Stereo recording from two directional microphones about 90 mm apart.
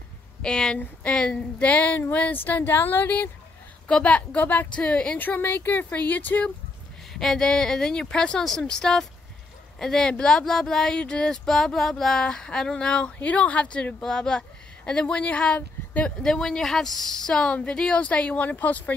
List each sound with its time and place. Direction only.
0.4 s speech: 10° left (ahead or behind)
7.2 s speech: 5° left (ahead or behind)